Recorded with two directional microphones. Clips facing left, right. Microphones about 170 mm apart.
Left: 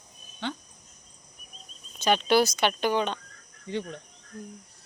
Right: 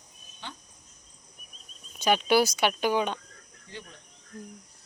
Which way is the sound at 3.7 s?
65° left (ahead or behind).